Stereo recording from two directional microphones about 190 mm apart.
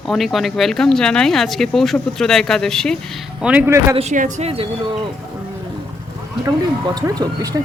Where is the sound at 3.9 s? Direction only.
40° right (ahead or behind).